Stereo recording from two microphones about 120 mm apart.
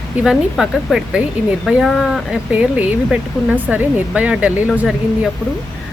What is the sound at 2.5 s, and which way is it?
Speech, 10° right (ahead or behind).